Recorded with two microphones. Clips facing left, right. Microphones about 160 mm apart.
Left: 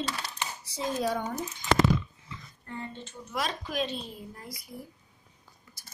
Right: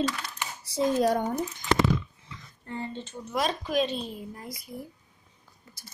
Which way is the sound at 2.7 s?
25° right (ahead or behind).